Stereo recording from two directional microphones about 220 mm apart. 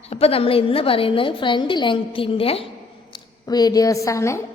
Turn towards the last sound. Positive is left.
turn(degrees=15)  # may be behind; listen again after turning